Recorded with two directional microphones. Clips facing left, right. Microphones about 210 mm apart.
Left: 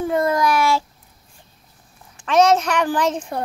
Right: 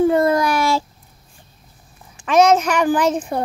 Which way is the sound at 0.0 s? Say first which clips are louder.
Right 4 dB; 35° right (ahead or behind).